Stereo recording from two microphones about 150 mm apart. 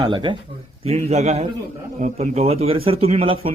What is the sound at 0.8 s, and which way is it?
Speech, 50° right (ahead or behind).